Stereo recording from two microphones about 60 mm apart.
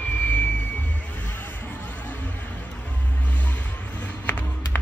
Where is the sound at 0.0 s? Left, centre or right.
Left.